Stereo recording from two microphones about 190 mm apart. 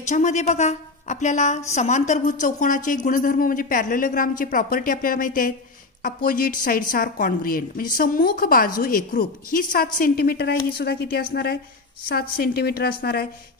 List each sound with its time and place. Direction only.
0.1 s a woman's voice: 40° left (ahead or behind); by 13.3 s 55° left (ahead or behind)